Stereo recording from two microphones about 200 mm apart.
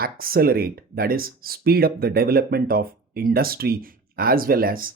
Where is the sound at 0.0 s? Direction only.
45° right (ahead or behind).